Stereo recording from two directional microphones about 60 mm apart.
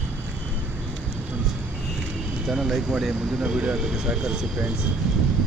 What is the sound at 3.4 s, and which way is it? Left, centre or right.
Speech, centre.